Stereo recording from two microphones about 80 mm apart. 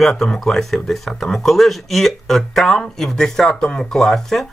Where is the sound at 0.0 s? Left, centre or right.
Centre.